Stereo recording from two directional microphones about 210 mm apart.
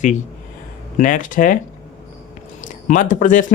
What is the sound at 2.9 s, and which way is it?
Speech, 35° left (ahead or behind).